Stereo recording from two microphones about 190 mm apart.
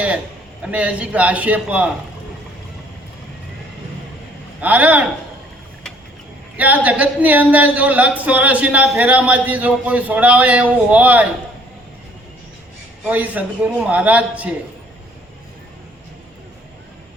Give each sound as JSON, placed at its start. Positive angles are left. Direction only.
{"t": 0.6, "sound": "speech", "side_deg": -5}
{"t": 4.6, "sound": "speech", "side_deg": -10}
{"t": 6.6, "sound": "speech", "side_deg": -10}
{"t": 13.1, "sound": "speech", "side_deg": -10}